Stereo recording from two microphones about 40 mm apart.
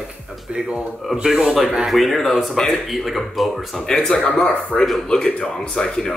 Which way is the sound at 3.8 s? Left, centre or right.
Centre.